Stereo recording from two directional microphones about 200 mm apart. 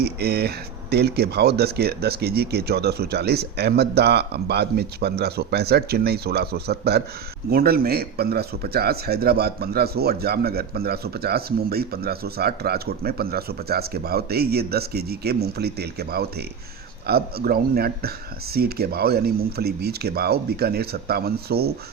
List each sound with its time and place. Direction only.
0.0 s speech: 55° right (ahead or behind)